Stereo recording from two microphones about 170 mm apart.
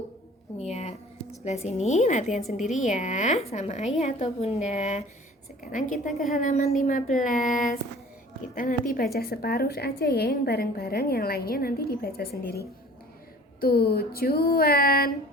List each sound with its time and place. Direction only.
0.6 s a sound: 40° left (ahead or behind)
1.5 s a woman's voice: 40° left (ahead or behind); by 12.3 s 65° left (ahead or behind)
13.6 s a woman's voice: 65° left (ahead or behind)